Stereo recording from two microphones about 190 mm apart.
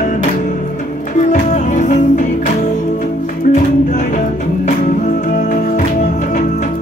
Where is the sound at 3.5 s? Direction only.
40° left (ahead or behind).